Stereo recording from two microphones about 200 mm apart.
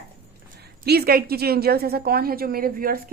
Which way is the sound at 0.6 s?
55° right (ahead or behind).